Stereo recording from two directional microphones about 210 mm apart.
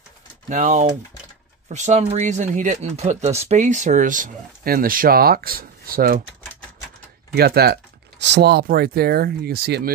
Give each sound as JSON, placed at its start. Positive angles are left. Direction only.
{"t": 0.5, "sound": "speech", "side_deg": -35}
{"t": 7.3, "sound": "speech", "side_deg": -50}